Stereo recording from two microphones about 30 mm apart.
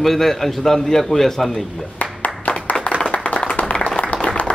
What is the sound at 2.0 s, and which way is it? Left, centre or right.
Clapping, left.